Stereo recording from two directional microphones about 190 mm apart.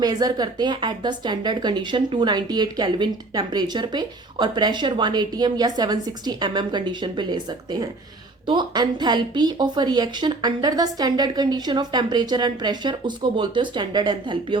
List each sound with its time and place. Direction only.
0.0 s a woman's voice: 20° right (ahead or behind)